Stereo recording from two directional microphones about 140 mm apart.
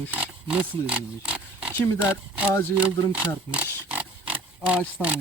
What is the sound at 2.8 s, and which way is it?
Speech, 10° right (ahead or behind).